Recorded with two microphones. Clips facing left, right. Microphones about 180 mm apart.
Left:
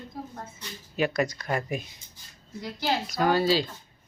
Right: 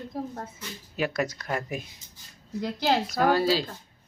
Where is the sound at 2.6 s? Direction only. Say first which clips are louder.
Right 4 dB; 55° right (ahead or behind).